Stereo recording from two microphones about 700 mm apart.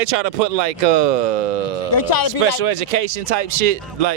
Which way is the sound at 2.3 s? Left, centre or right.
Right.